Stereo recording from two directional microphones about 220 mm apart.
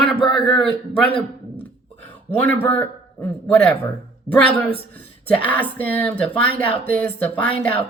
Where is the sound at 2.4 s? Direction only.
10° left (ahead or behind).